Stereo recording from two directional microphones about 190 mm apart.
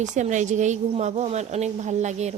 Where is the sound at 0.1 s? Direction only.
40° right (ahead or behind).